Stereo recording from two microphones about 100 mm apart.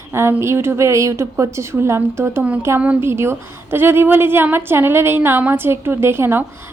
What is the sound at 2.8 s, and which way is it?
Speech, 15° right (ahead or behind).